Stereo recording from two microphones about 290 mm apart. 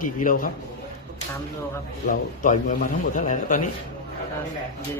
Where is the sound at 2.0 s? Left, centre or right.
Left.